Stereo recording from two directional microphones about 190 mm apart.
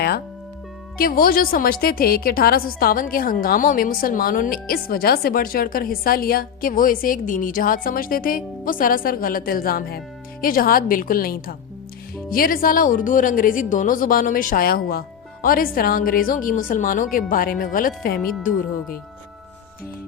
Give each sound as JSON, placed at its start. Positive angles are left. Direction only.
{"t": 0.9, "sound": "a woman's voice", "side_deg": 50}